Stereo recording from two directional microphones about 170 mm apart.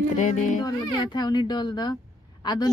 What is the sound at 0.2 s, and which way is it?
Speech, 45° left (ahead or behind).